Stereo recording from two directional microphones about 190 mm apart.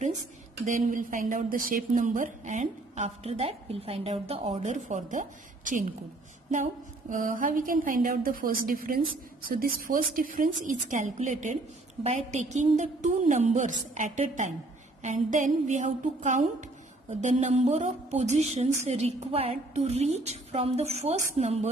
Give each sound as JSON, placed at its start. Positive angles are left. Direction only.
{"t": 0.7, "sound": "a woman's voice", "side_deg": -45}